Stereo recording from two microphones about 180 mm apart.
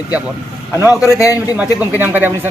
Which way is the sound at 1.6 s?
10° right (ahead or behind).